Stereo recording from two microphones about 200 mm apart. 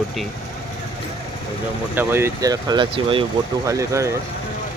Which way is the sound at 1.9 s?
10° right (ahead or behind).